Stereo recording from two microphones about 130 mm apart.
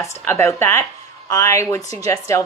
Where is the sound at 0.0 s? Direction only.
20° left (ahead or behind).